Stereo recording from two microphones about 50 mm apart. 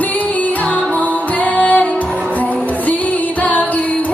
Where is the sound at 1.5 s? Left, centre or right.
Left.